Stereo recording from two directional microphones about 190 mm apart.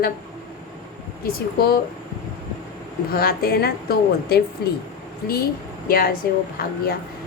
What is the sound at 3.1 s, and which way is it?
A woman's voice, 50° left (ahead or behind).